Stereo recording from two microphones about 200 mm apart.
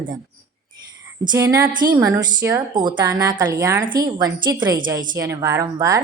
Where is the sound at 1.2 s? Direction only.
15° right (ahead or behind).